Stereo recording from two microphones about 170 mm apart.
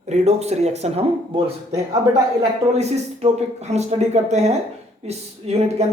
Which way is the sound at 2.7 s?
40° right (ahead or behind).